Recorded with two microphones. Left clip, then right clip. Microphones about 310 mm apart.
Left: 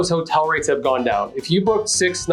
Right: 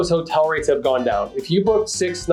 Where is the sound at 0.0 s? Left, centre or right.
Left.